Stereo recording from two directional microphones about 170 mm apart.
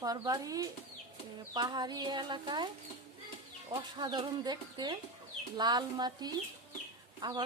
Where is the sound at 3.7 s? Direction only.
25° right (ahead or behind).